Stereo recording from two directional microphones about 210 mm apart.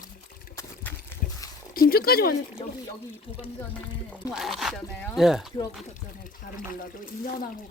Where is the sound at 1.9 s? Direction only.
45° left (ahead or behind).